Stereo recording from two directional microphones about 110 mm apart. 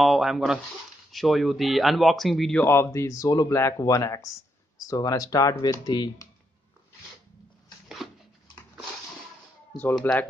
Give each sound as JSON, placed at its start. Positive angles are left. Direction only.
{"t": 0.0, "sound": "speech", "side_deg": 0}
{"t": 2.5, "sound": "speech", "side_deg": 20}
{"t": 10.1, "sound": "speech", "side_deg": 20}